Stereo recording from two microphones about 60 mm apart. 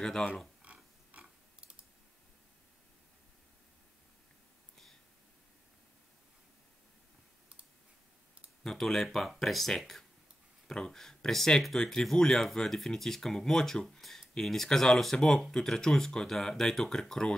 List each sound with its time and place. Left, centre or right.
0.0 s speech: centre
0.6 s a sound: centre
8.6 s speech: centre